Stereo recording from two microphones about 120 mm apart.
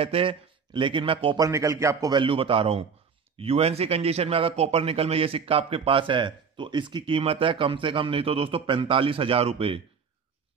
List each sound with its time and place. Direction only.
0.0 s speech: 50° right (ahead or behind)
1.4 s speech: 25° right (ahead or behind)
2.1 s a man's voice: 50° right (ahead or behind)